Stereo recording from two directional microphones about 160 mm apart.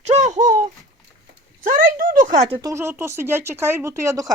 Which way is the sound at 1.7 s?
55° right (ahead or behind).